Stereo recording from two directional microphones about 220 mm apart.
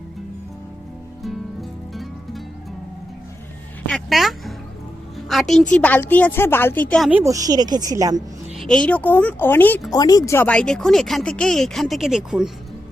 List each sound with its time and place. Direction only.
1.9 s music: centre (ahead or behind)
3.8 s a sound: centre (ahead or behind)
5.1 s music: centre (ahead or behind)
5.7 s a woman's voice: 5° left (ahead or behind)
7.1 s speech: 10° right (ahead or behind)
8.5 s speech: 5° left (ahead or behind)